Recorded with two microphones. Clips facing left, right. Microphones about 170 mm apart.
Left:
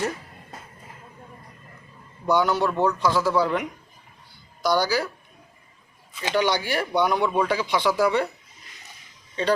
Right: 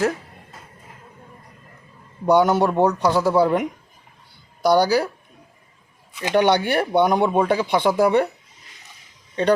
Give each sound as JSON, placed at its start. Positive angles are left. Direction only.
{"t": 2.3, "sound": "speech", "side_deg": -50}
{"t": 3.4, "sound": "a man's voice", "side_deg": -45}
{"t": 4.6, "sound": "speech", "side_deg": -60}
{"t": 6.1, "sound": "speech", "side_deg": -60}